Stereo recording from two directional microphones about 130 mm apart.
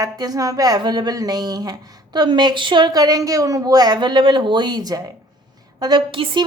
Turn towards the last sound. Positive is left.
turn(degrees=-40)  # may be behind; listen again after turning